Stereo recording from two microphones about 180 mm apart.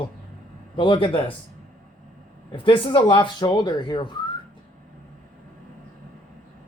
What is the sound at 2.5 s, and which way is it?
Speech, 30° left (ahead or behind).